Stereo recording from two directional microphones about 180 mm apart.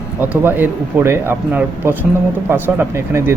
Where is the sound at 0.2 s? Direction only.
10° right (ahead or behind).